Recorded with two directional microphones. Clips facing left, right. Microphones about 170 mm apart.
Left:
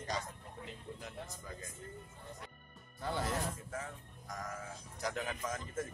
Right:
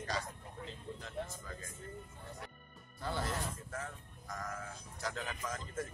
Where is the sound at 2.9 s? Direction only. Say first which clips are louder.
Left 1 dB; 15° left (ahead or behind).